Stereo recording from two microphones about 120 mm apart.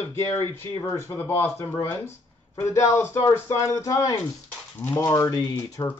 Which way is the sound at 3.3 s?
25° left (ahead or behind).